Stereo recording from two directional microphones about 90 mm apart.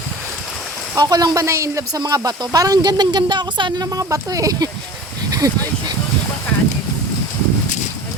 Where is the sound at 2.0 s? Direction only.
45° right (ahead or behind).